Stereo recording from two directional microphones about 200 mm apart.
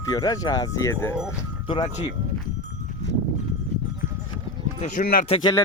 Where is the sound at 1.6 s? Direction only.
25° left (ahead or behind).